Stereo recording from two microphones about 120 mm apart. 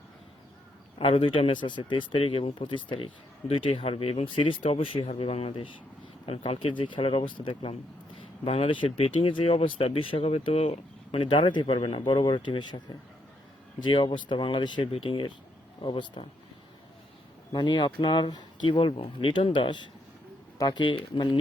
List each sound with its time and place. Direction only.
0.9 s speech: 50° left (ahead or behind)
17.5 s speech: 40° left (ahead or behind)